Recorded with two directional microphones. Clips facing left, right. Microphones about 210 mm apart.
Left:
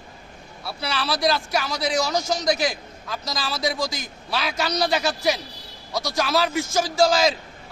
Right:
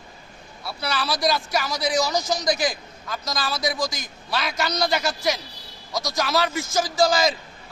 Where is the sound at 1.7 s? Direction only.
25° left (ahead or behind).